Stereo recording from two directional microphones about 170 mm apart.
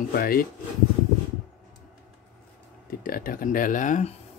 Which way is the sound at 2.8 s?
55° left (ahead or behind).